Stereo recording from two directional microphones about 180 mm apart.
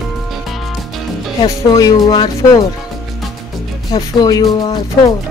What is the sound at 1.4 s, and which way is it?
Speech, 20° left (ahead or behind).